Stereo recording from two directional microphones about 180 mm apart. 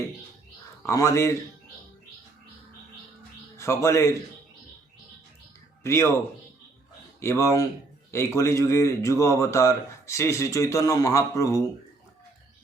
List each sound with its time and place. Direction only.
0.8 s speech: 15° left (ahead or behind)
3.6 s speech: 15° left (ahead or behind)
5.8 s speech: 15° left (ahead or behind)
7.2 s speech: 15° left (ahead or behind)